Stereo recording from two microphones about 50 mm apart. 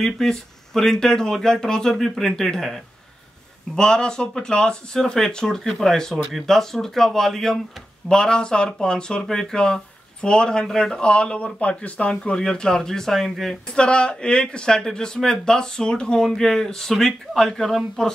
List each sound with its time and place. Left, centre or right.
0.0 s speech: centre
3.7 s speech: centre
13.7 s speech: centre